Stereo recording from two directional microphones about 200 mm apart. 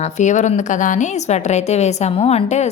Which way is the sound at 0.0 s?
35° left (ahead or behind).